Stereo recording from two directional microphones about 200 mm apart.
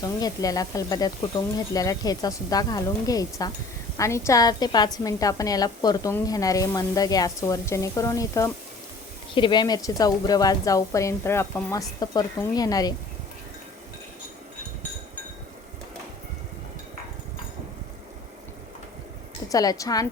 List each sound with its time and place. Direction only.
0.0 s a woman's voice: 20° left (ahead or behind)
19.5 s a woman's voice: 15° left (ahead or behind)